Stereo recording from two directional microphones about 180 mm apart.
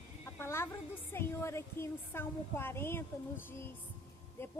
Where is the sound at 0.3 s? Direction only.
15° left (ahead or behind).